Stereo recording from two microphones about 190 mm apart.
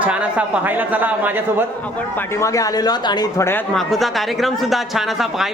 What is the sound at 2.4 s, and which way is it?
A man's voice, 15° left (ahead or behind).